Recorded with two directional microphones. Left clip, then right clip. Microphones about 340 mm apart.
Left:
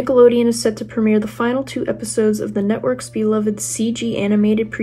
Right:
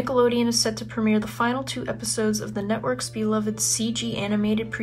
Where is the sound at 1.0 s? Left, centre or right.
Left.